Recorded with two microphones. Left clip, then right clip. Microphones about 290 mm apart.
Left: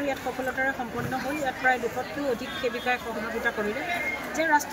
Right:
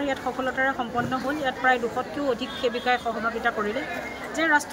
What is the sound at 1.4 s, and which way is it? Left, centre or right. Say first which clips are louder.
Speech: right 2 dB; centre.